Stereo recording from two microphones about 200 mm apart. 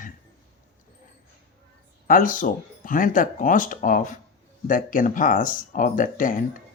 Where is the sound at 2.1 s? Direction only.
40° left (ahead or behind).